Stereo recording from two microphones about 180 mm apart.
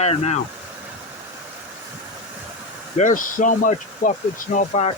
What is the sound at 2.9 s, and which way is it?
Speech, 45° left (ahead or behind).